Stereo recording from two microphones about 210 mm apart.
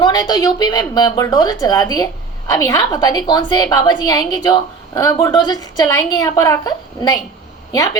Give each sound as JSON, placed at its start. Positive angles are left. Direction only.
{"t": 0.0, "sound": "a woman's voice", "side_deg": 20}